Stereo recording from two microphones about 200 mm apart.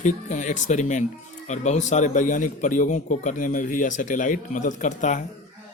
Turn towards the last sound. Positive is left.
turn(degrees=40)  # may be behind; listen again after turning